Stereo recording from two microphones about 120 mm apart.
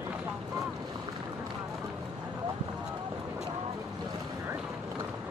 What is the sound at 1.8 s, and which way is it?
Boat, 10° right (ahead or behind).